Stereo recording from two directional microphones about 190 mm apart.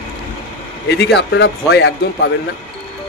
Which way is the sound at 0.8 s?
60° left (ahead or behind).